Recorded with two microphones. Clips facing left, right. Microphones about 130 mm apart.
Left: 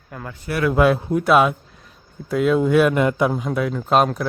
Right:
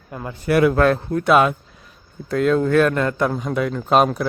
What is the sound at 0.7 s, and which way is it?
A man's voice, 10° left (ahead or behind).